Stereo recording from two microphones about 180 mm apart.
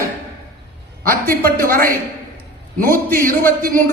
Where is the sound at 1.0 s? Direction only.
55° right (ahead or behind).